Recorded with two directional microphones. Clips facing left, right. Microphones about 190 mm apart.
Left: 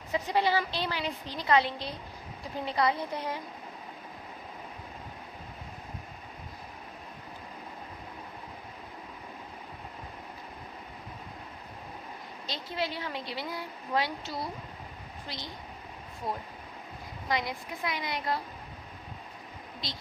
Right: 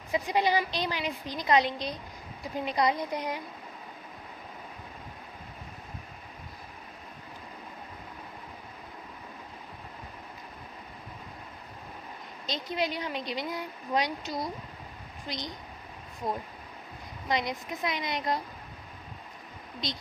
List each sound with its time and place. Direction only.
0.1 s a woman's voice: 15° right (ahead or behind)
12.5 s a woman's voice: 20° right (ahead or behind)
17.2 s speech: 20° right (ahead or behind)
19.8 s speech: 20° right (ahead or behind)